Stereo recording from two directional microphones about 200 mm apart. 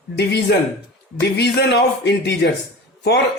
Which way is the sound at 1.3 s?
55° left (ahead or behind).